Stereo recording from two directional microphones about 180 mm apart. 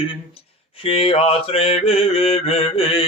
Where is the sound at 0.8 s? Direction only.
30° left (ahead or behind).